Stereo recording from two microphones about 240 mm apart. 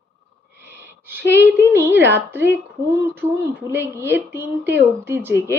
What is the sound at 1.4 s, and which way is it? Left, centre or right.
Speech, centre.